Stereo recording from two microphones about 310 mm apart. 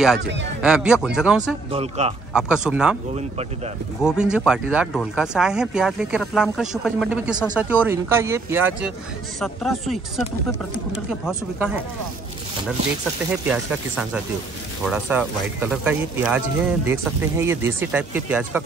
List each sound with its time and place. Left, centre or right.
0.6 s speech: centre
1.7 s speech: centre
2.3 s speech: centre
3.2 s speech: right
4.0 s speech: centre
13.5 s speech: centre